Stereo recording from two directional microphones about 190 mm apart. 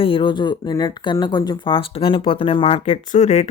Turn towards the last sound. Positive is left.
turn(degrees=40)  # may be behind; listen again after turning